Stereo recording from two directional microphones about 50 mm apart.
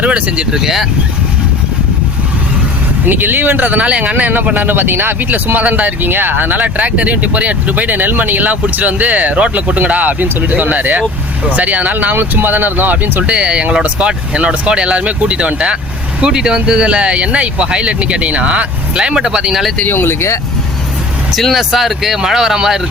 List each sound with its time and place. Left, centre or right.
0.0 s speech: right
0.5 s speech: centre
3.1 s speech: right
13.3 s speech: right
19.9 s speech: left
21.3 s speech: centre